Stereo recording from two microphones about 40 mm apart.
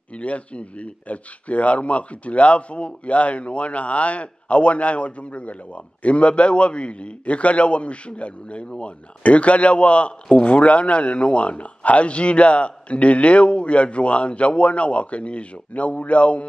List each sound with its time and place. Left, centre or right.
0.1 s a man's voice: left